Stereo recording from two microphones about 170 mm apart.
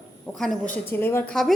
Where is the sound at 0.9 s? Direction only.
15° left (ahead or behind).